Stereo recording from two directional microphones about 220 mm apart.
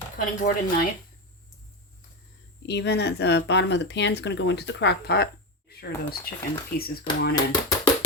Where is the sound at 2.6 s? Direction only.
50° left (ahead or behind).